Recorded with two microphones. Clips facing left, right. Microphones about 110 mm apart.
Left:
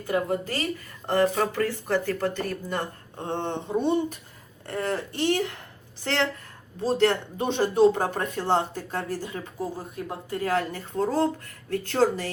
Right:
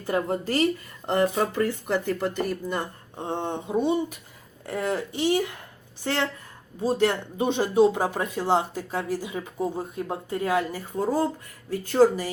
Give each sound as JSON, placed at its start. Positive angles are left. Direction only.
{"t": 0.0, "sound": "speech", "side_deg": -30}
{"t": 1.5, "sound": "speech", "side_deg": -20}
{"t": 6.8, "sound": "speech", "side_deg": -5}
{"t": 9.6, "sound": "speech", "side_deg": -25}
{"t": 10.6, "sound": "speech", "side_deg": -5}